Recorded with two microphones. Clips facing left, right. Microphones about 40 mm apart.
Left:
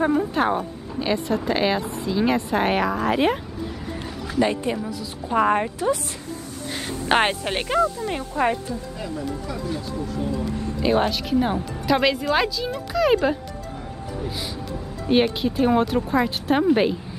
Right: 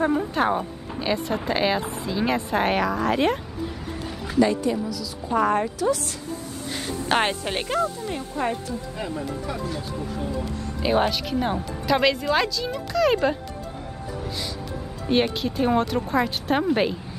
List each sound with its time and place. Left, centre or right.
0.0 s speech: centre
4.4 s speech: left; by 7.8 s centre
7.8 s speech: left
10.8 s speech: centre
15.0 s speech: centre